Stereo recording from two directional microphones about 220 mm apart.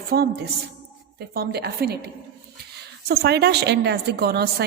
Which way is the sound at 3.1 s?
45° right (ahead or behind).